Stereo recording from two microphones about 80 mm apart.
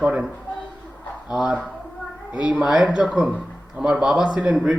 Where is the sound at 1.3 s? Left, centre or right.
Centre.